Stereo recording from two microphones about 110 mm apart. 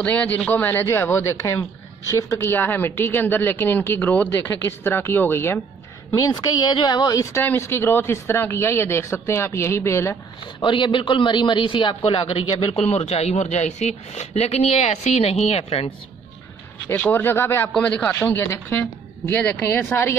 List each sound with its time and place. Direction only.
0.0 s speech: 10° left (ahead or behind)
6.1 s speech: 35° left (ahead or behind)
10.4 s a man's voice: 45° left (ahead or behind)
12.8 s speech: 85° left; by 15.9 s 65° left (ahead or behind)
16.9 s speech: 15° left (ahead or behind)
17.7 s speech: 10° left (ahead or behind)